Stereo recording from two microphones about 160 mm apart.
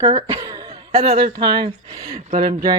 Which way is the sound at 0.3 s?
25° right (ahead or behind).